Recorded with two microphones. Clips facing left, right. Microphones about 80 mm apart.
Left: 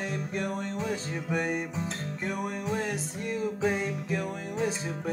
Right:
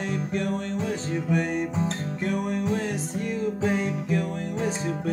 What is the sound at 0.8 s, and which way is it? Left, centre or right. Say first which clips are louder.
Music: right 4 dB; right.